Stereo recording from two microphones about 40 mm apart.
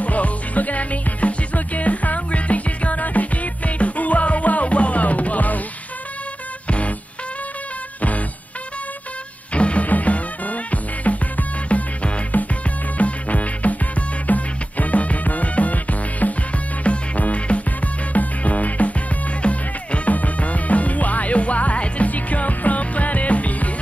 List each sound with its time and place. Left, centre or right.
0.0 s music: left
9.5 s music: left